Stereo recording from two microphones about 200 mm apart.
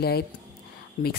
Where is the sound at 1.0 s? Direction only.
40° left (ahead or behind).